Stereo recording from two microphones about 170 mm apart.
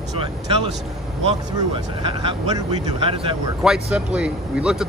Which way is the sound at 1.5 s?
30° right (ahead or behind).